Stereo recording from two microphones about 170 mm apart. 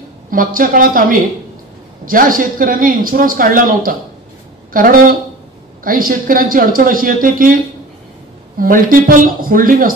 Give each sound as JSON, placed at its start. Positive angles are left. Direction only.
{"t": 0.3, "sound": "speech", "side_deg": -55}
{"t": 8.5, "sound": "speech", "side_deg": -55}